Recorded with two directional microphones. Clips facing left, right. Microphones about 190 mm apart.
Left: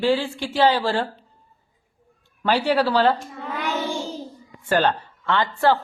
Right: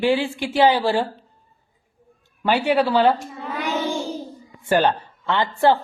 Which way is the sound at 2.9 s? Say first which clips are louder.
Right 3 dB; centre (ahead or behind).